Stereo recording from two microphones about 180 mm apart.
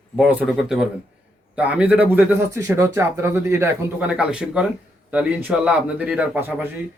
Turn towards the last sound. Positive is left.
turn(degrees=-10)  # may be behind; listen again after turning